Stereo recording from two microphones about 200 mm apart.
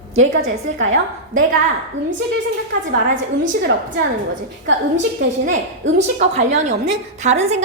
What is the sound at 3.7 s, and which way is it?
Speech, 65° right (ahead or behind).